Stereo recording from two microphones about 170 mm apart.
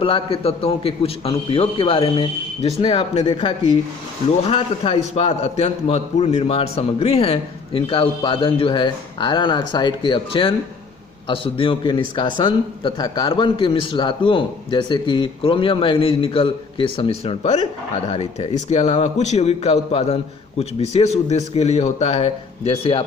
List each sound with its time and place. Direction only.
0.0 s a man's voice: 35° left (ahead or behind)